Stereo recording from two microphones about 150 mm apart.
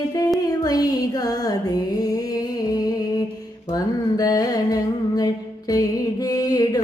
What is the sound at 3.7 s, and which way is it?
Carnatic music, 25° left (ahead or behind).